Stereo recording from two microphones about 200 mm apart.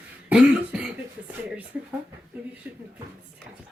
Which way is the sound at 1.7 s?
5° right (ahead or behind).